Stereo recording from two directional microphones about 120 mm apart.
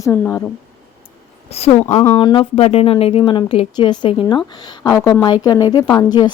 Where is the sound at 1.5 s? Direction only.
60° left (ahead or behind).